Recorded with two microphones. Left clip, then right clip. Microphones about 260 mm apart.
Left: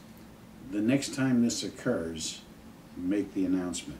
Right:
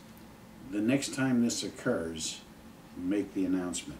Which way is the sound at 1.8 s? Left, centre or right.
Centre.